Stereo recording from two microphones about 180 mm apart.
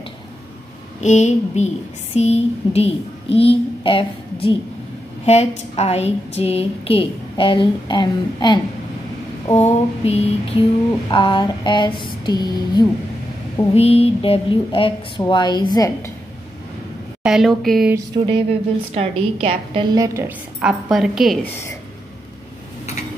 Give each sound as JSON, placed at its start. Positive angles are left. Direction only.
{"t": 1.0, "sound": "a woman's voice", "side_deg": 40}
{"t": 9.5, "sound": "a woman's voice", "side_deg": 35}
{"t": 13.7, "sound": "speech", "side_deg": 35}
{"t": 17.2, "sound": "a woman's voice", "side_deg": 0}
{"t": 17.9, "sound": "a woman's voice", "side_deg": -25}
{"t": 20.6, "sound": "a woman's voice", "side_deg": 0}